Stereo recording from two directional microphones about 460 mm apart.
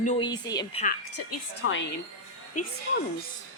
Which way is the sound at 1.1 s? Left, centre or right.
Left.